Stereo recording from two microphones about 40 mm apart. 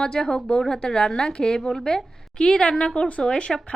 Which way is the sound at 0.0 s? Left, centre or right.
Left.